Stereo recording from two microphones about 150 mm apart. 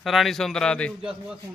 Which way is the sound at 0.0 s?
Centre (ahead or behind).